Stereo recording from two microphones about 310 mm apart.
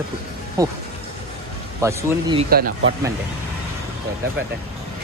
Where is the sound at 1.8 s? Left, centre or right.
Centre.